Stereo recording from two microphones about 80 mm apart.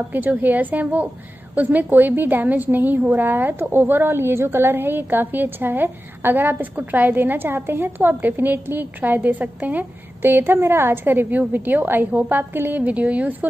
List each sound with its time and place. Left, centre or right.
0.1 s a woman's voice: right